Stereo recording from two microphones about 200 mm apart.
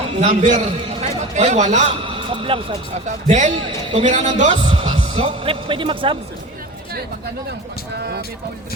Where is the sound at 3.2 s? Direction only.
35° right (ahead or behind).